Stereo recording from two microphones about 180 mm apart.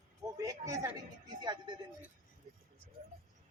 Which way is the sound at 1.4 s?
25° right (ahead or behind).